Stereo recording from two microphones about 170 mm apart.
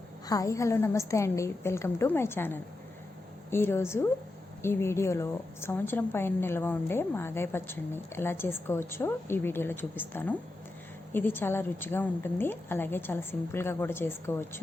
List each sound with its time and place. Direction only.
0.3 s a woman's voice: 20° left (ahead or behind)